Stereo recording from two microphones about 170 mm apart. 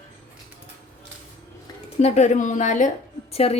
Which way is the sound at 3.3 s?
35° left (ahead or behind).